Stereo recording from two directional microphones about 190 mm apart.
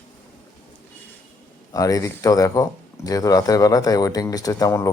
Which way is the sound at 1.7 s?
15° left (ahead or behind).